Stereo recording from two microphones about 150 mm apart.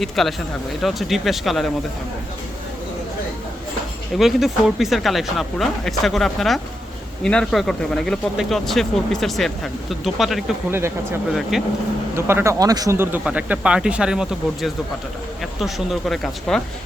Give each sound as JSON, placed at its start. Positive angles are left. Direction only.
{"t": 0.0, "sound": "speech", "side_deg": 0}
{"t": 4.2, "sound": "speech", "side_deg": 0}
{"t": 10.7, "sound": "speech", "side_deg": -15}
{"t": 11.5, "sound": "speech", "side_deg": 0}
{"t": 12.1, "sound": "speech", "side_deg": -15}